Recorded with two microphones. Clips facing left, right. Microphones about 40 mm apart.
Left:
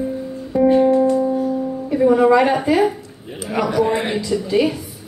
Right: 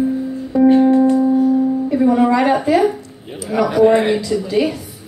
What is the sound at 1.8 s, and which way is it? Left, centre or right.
Music, centre.